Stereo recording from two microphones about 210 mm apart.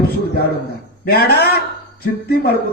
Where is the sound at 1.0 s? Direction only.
50° left (ahead or behind).